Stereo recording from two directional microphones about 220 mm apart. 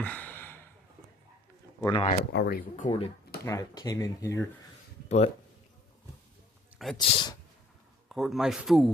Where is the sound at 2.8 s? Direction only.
25° left (ahead or behind).